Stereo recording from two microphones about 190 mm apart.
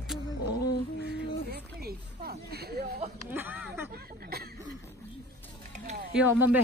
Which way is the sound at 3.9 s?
55° right (ahead or behind).